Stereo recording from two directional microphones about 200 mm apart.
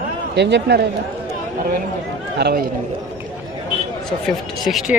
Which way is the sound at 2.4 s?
55° right (ahead or behind).